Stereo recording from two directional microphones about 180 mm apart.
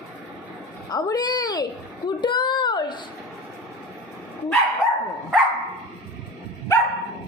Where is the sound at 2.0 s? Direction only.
25° left (ahead or behind).